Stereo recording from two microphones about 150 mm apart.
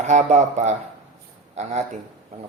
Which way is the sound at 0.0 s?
55° right (ahead or behind).